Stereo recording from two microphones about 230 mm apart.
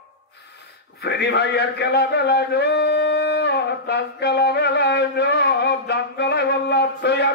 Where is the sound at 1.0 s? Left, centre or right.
Left.